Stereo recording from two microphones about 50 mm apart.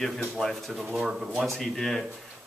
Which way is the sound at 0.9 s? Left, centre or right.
Centre.